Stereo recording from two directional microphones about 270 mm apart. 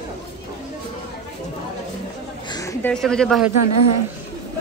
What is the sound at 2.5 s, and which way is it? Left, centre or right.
Speech, centre.